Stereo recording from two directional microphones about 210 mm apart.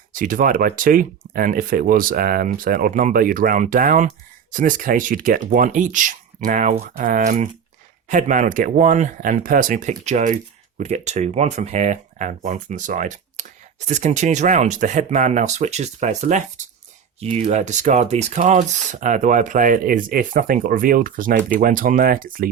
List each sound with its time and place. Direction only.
0.1 s speech: 40° right (ahead or behind)